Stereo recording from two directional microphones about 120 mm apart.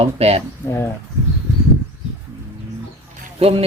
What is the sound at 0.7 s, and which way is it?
Speech, 20° left (ahead or behind).